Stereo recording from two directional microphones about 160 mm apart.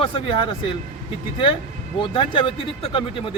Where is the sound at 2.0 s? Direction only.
30° left (ahead or behind).